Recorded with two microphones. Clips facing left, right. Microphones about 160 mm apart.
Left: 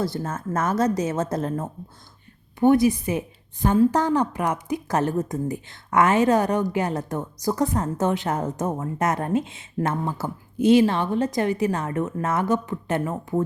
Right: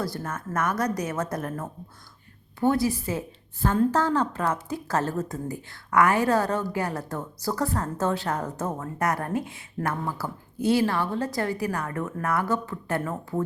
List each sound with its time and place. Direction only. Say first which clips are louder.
0.0 s a woman's voice: left 4 dB; 25° left (ahead or behind)